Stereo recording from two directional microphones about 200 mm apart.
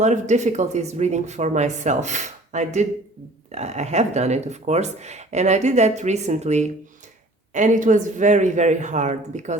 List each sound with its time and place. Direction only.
0.0 s speech: 35° right (ahead or behind)